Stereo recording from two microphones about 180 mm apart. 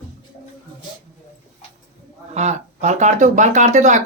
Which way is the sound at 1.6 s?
40° left (ahead or behind).